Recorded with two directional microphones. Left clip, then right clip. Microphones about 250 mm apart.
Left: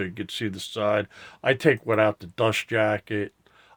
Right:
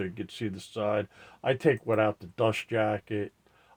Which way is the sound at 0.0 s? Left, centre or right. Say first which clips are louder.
Left 5 dB; left.